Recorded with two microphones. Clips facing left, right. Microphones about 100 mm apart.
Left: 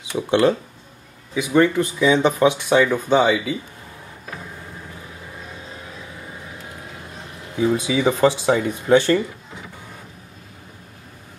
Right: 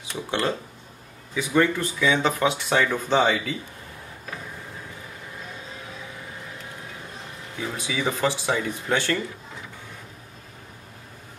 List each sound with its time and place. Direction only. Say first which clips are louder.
0.1 s speech: left 9 dB; 20° left (ahead or behind)
1.3 s speech: left 5 dB; 15° left (ahead or behind)
7.5 s speech: left 10 dB; 20° left (ahead or behind)